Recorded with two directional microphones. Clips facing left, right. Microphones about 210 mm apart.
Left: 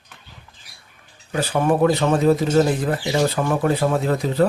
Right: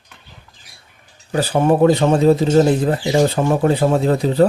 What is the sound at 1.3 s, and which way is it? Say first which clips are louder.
Speech: right 4 dB; 35° right (ahead or behind).